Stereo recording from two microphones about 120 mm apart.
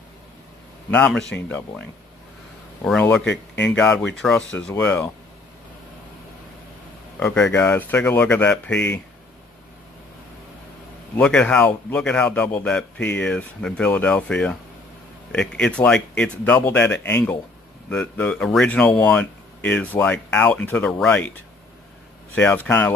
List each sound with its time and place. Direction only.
0.8 s a man's voice: 10° left (ahead or behind)
7.2 s a man's voice: 15° left (ahead or behind)
11.1 s a man's voice: 10° left (ahead or behind)
22.3 s a man's voice: 15° left (ahead or behind)